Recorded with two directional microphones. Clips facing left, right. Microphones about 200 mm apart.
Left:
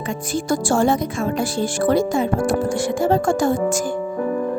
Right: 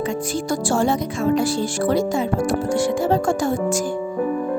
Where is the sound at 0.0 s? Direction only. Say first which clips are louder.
Right 1 dB; 50° left (ahead or behind).